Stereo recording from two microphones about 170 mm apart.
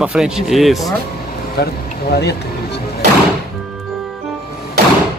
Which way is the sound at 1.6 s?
70° left (ahead or behind).